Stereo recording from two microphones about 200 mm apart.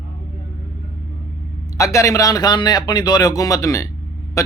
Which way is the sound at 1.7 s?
15° left (ahead or behind).